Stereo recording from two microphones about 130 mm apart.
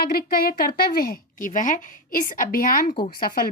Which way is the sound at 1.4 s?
90° left.